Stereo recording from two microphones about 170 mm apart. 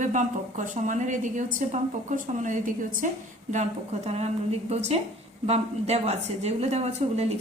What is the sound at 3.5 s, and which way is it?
A woman's voice, 40° right (ahead or behind).